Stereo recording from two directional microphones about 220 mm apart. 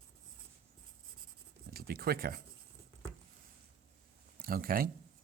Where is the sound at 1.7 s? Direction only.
45° right (ahead or behind).